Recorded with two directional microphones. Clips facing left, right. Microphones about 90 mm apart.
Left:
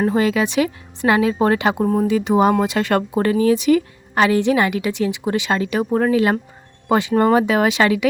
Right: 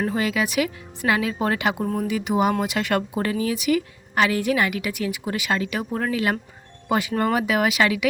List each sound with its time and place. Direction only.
0.0 s speech: 35° left (ahead or behind)